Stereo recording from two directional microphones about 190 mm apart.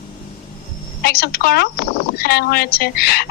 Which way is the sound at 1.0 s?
55° left (ahead or behind).